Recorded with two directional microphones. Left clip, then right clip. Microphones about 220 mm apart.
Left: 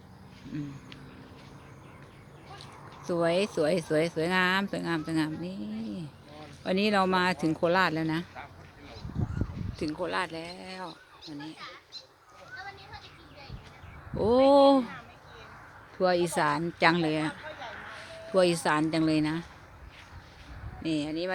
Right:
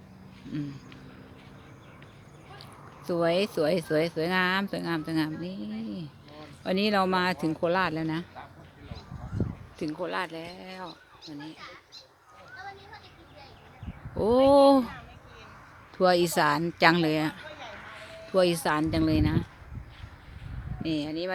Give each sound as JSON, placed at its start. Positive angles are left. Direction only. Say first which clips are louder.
{"t": 3.1, "sound": "speech", "louder": "right 1 dB", "side_deg": -5}
{"t": 9.7, "sound": "speech", "louder": "even", "side_deg": 0}
{"t": 14.2, "sound": "speech", "louder": "right 1 dB", "side_deg": -5}
{"t": 16.0, "sound": "speech", "louder": "right 3 dB", "side_deg": -15}
{"t": 17.5, "sound": "a sound", "louder": "left 1 dB", "side_deg": -40}
{"t": 18.3, "sound": "speech", "louder": "even", "side_deg": 0}
{"t": 20.8, "sound": "speech", "louder": "even", "side_deg": -5}